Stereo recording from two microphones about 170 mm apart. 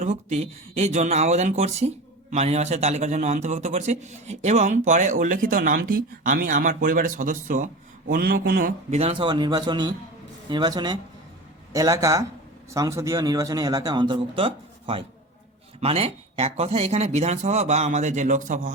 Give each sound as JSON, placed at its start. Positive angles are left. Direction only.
{"t": 0.0, "sound": "a man's voice", "side_deg": -40}
{"t": 8.9, "sound": "speech", "side_deg": -35}